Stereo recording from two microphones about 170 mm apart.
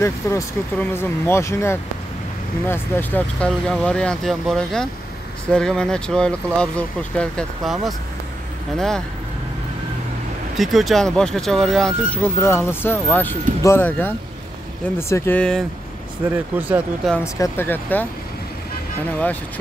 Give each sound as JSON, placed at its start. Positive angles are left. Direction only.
{"t": 0.0, "sound": "speech", "side_deg": 15}
{"t": 10.6, "sound": "speech", "side_deg": 0}
{"t": 12.2, "sound": "speech", "side_deg": 15}
{"t": 16.3, "sound": "speech", "side_deg": -10}
{"t": 17.2, "sound": "speech", "side_deg": 15}